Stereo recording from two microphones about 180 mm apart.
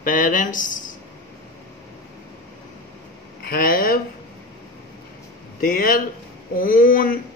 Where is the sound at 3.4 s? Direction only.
55° left (ahead or behind).